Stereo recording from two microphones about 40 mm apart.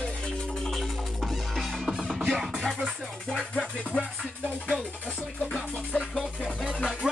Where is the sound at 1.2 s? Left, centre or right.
Centre.